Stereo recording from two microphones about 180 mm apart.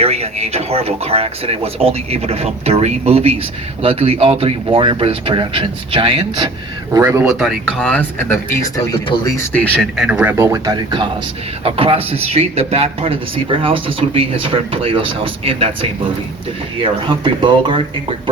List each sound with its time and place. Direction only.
0.0 s speech: 35° right (ahead or behind)
6.9 s speech: 15° right (ahead or behind)
7.3 s speech: centre (ahead or behind)
10.1 s speech: 10° right (ahead or behind); by 17.7 s 25° right (ahead or behind)